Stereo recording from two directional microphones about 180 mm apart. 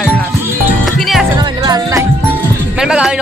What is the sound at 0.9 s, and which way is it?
Music, centre (ahead or behind).